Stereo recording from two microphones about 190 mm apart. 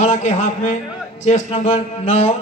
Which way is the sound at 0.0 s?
40° left (ahead or behind).